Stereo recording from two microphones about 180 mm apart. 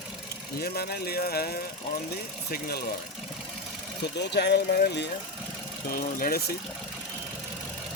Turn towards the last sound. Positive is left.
turn(degrees=55)  # may be behind; listen again after turning